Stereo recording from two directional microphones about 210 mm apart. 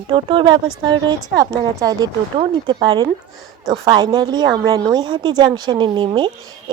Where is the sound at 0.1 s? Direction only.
25° right (ahead or behind).